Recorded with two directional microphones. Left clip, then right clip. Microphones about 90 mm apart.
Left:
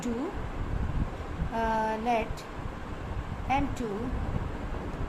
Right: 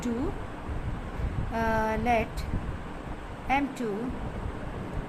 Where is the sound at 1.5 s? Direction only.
40° right (ahead or behind).